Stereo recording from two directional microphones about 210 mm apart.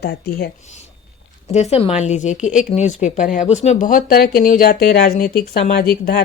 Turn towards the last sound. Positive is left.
turn(degrees=40)  # may be behind; listen again after turning